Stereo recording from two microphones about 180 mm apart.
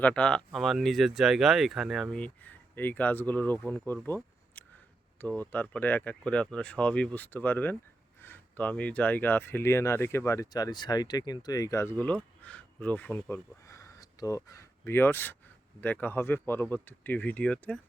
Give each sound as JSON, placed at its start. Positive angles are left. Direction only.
{"t": 0.0, "sound": "speech", "side_deg": 5}